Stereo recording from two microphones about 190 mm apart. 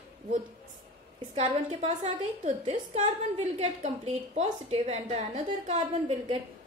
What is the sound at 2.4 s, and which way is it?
A woman's voice, 40° right (ahead or behind).